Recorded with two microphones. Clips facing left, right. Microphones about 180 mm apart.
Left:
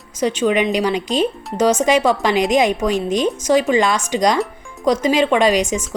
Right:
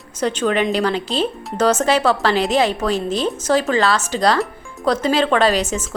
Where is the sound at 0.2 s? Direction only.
10° left (ahead or behind).